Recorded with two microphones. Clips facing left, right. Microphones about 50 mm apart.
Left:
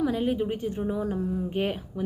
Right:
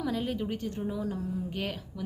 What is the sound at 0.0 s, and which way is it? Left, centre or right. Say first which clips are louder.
A woman's voice: left 6 dB; centre.